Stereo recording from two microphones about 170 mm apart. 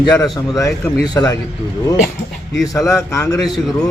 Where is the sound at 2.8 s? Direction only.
20° left (ahead or behind).